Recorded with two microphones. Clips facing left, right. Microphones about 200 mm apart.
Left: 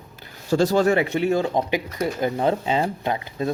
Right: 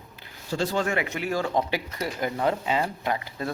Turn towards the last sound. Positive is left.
turn(degrees=20)  # may be behind; listen again after turning